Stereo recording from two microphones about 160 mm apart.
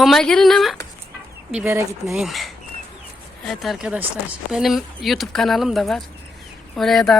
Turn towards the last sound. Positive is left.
turn(degrees=0)  # may be behind; listen again after turning